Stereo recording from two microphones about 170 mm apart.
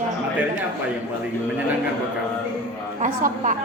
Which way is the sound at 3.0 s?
45° right (ahead or behind).